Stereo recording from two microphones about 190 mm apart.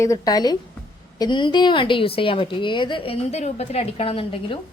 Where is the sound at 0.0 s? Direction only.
20° left (ahead or behind).